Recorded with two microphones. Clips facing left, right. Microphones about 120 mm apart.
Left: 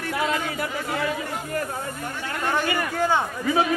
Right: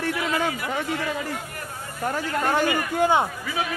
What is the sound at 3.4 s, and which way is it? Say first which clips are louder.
Speech: left 7 dB; 35° left (ahead or behind).